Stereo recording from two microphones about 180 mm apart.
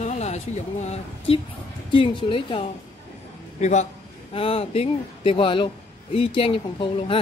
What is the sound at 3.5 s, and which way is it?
A man's voice, 40° left (ahead or behind).